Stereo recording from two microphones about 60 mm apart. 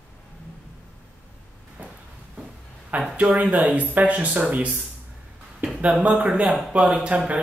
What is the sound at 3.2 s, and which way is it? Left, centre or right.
Speech, right.